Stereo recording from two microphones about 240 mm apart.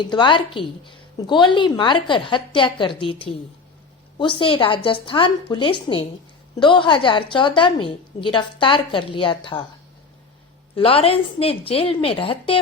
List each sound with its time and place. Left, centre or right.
0.0 s a woman's voice: centre
10.8 s a woman's voice: left